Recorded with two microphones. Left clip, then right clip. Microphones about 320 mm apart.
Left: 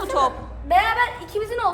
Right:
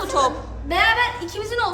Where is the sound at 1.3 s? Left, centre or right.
Centre.